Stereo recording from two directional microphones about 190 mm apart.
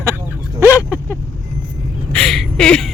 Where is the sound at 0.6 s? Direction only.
15° left (ahead or behind).